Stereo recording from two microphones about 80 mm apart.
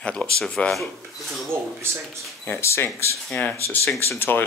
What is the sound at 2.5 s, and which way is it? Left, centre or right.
Speech, left.